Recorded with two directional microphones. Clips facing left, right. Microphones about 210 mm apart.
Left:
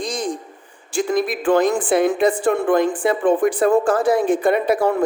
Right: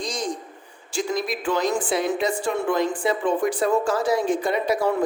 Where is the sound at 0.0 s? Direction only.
55° left (ahead or behind).